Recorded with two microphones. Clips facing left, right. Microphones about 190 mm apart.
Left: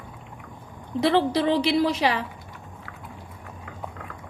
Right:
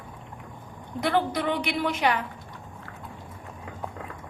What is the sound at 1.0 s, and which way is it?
A woman's voice, 30° left (ahead or behind).